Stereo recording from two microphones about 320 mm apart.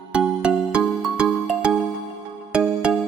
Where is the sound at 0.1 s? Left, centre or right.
Centre.